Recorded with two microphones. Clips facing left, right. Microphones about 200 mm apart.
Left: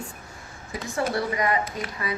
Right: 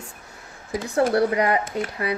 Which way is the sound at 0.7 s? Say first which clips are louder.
Right 6 dB; 65° right (ahead or behind).